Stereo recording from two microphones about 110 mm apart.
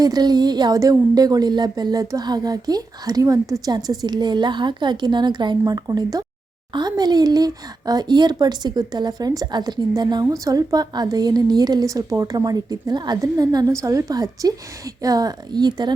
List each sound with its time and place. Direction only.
0.0 s speech: 40° right (ahead or behind)